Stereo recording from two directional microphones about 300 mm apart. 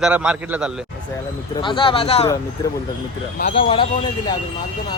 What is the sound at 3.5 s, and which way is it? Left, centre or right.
Speech, centre.